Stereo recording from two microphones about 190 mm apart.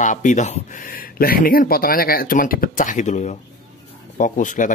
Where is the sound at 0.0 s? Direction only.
40° left (ahead or behind).